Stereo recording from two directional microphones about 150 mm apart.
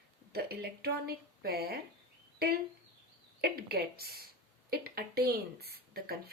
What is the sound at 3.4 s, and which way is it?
A woman's voice, 90° right.